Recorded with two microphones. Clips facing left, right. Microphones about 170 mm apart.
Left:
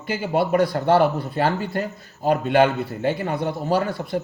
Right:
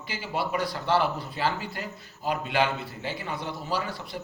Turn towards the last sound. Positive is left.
turn(degrees=55)  # may be behind; listen again after turning